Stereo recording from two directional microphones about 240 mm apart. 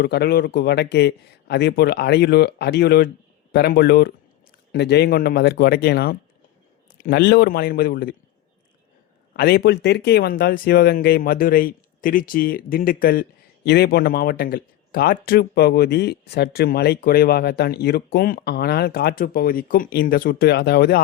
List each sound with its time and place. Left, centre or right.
0.0 s speech: left
9.3 s speech: left